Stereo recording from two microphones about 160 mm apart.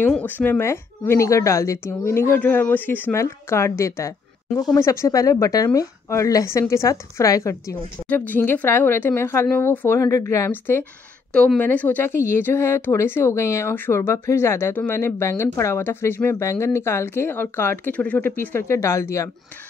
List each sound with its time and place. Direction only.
0.0 s a woman's voice: 10° left (ahead or behind)